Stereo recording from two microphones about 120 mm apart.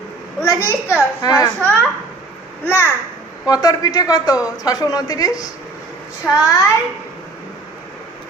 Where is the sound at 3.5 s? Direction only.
30° left (ahead or behind).